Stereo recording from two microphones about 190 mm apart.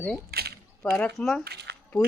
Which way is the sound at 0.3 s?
55° right (ahead or behind).